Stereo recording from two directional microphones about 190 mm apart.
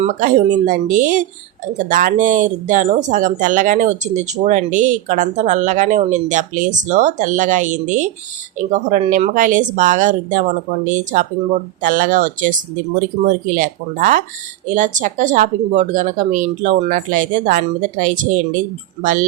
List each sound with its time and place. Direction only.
0.0 s speech: 40° right (ahead or behind)